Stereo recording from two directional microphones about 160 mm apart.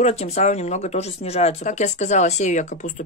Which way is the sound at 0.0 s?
45° left (ahead or behind).